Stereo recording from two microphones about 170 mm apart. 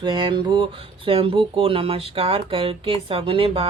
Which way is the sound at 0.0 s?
30° right (ahead or behind).